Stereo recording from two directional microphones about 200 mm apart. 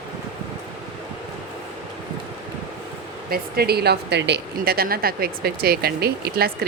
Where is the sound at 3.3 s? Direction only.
50° right (ahead or behind).